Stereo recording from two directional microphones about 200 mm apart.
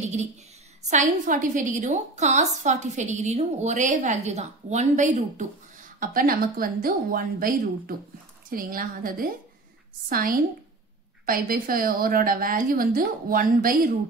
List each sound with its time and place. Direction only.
0.8 s a woman's voice: 40° right (ahead or behind)